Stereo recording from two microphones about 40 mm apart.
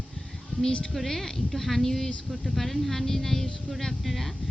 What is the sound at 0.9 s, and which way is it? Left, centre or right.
Speech, centre.